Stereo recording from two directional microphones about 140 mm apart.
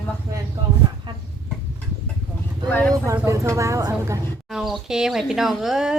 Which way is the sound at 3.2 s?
20° right (ahead or behind).